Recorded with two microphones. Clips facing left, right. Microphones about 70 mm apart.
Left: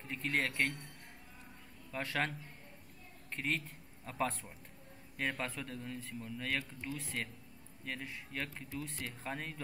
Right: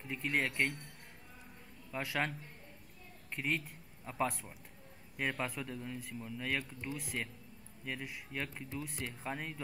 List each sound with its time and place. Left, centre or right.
0.0 s speech: centre
1.9 s a man's voice: centre